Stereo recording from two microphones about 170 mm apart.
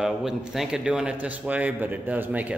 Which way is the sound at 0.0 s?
5° right (ahead or behind).